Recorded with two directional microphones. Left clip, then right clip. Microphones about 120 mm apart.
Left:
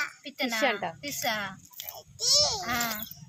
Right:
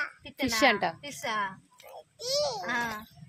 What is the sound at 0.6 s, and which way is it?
Speech, 65° right (ahead or behind).